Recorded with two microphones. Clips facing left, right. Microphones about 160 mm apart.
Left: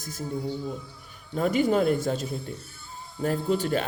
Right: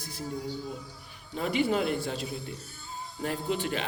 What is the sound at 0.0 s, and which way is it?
Speech, 45° left (ahead or behind).